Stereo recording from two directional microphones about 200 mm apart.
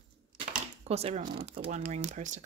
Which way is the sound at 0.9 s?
30° right (ahead or behind).